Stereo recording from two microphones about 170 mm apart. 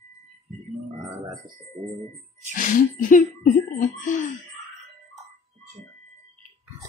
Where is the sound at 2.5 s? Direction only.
50° left (ahead or behind).